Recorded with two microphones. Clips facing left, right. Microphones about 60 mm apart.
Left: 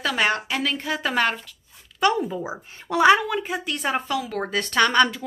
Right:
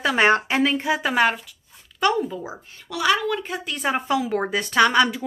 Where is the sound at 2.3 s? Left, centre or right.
Centre.